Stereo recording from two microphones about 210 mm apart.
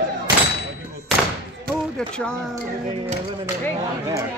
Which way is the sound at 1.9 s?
5° left (ahead or behind).